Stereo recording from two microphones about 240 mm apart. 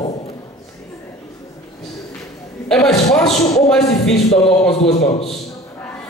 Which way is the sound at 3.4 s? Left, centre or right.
Centre.